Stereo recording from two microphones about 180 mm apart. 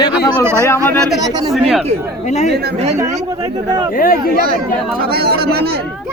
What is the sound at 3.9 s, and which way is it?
Speech, 55° left (ahead or behind).